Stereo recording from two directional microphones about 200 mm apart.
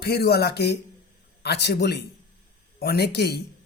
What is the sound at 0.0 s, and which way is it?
A man's voice, 55° left (ahead or behind).